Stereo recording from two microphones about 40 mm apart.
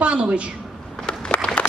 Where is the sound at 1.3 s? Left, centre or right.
Left.